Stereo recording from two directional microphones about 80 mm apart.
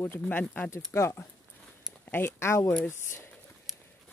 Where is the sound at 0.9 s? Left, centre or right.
Left.